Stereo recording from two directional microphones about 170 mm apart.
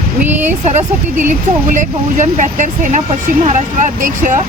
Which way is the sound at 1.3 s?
45° right (ahead or behind).